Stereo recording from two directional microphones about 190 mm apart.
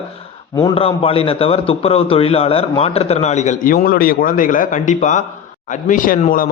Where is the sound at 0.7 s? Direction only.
30° left (ahead or behind).